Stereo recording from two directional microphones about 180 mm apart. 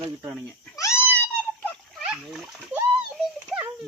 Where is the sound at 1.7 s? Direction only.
Centre (ahead or behind).